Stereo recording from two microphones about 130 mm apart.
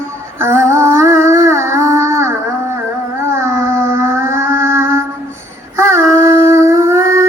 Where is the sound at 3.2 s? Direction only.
20° right (ahead or behind).